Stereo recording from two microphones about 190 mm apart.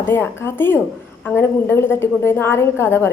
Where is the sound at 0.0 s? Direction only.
10° left (ahead or behind).